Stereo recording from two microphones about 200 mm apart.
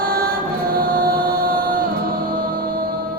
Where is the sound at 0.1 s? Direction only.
50° right (ahead or behind).